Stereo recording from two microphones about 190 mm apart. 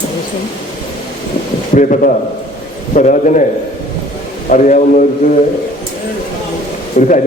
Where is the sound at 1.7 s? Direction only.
40° left (ahead or behind).